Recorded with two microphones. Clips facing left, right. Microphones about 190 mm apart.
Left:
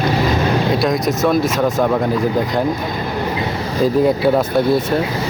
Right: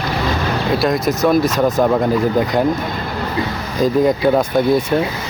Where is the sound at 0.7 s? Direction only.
Centre (ahead or behind).